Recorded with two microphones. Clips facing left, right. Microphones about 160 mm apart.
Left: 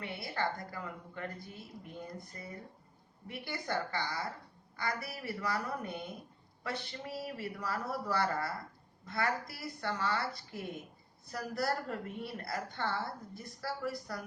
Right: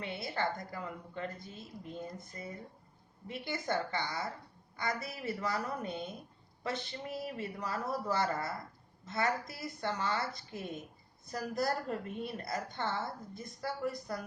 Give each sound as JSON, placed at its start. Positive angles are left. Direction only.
{"t": 0.0, "sound": "a woman's voice", "side_deg": -20}